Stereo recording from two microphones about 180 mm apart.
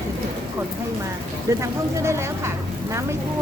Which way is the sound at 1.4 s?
15° right (ahead or behind).